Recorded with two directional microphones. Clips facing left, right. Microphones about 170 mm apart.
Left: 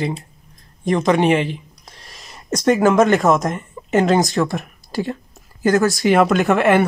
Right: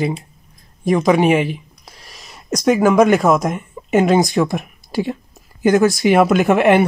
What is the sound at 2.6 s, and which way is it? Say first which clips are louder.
A man's voice: right 1 dB; 10° right (ahead or behind).